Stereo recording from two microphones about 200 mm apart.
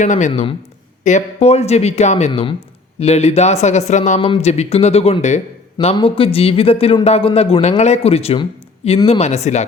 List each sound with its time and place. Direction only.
0.0 s speech: 40° left (ahead or behind)